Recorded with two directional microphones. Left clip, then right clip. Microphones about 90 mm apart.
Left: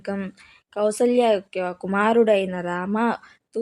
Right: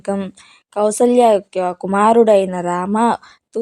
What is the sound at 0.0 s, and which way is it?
Speech, 30° right (ahead or behind).